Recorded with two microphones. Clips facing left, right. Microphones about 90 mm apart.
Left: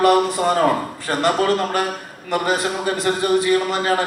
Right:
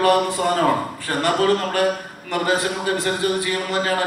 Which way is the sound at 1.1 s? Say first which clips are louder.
Left 1 dB; 20° left (ahead or behind).